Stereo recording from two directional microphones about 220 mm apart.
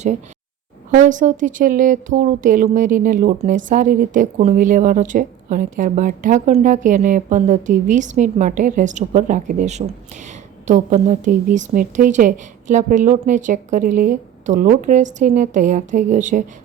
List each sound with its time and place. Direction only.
0.9 s speech: 35° right (ahead or behind)